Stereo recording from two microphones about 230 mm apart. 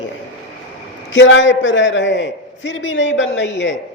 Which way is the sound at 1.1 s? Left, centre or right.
Left.